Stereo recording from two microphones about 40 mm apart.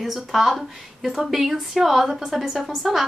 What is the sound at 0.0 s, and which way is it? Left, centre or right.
A woman's voice, centre.